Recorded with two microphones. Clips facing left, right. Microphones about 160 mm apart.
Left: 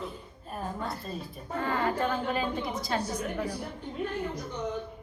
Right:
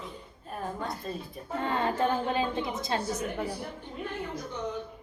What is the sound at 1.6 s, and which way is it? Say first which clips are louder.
A woman's voice: right 1 dB; 25° right (ahead or behind).